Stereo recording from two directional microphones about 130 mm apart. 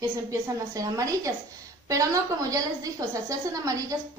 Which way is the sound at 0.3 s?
25° right (ahead or behind).